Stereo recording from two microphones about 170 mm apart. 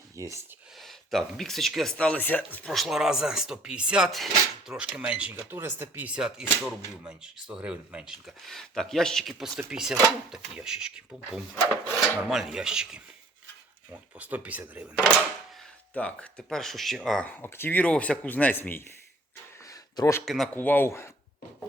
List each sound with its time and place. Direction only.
0.2 s speech: 20° right (ahead or behind)
0.8 s speech: centre (ahead or behind)
16.0 s speech: 5° left (ahead or behind)
19.6 s a sound: 20° left (ahead or behind)
20.2 s speech: centre (ahead or behind)
20.6 s speech: 10° left (ahead or behind)